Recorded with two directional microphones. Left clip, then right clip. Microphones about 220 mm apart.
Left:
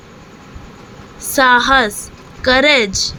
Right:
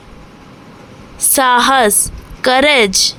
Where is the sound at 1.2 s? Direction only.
40° right (ahead or behind).